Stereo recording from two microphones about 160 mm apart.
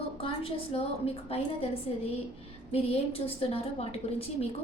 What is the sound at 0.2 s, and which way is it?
A woman's voice, 35° left (ahead or behind).